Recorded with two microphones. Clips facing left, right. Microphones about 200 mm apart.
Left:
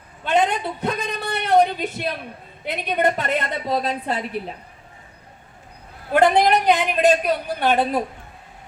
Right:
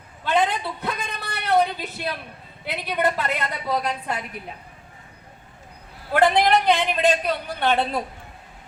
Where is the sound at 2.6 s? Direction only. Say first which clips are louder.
Left 3 dB; 20° left (ahead or behind).